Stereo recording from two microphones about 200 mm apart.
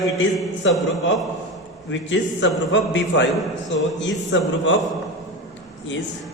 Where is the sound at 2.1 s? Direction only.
65° left (ahead or behind).